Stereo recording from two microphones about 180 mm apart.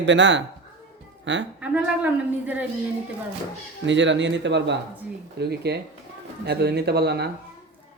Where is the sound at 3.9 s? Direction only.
90° right.